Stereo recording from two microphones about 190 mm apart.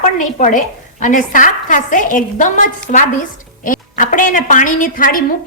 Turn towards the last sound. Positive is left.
turn(degrees=45)  # may be behind; listen again after turning